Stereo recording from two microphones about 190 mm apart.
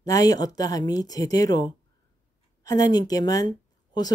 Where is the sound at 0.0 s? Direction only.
20° left (ahead or behind).